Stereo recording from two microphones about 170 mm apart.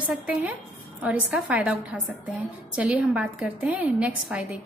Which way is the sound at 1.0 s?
10° right (ahead or behind).